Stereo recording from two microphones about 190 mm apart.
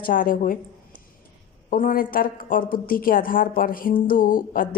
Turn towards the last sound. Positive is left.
turn(degrees=45)  # may be behind; listen again after turning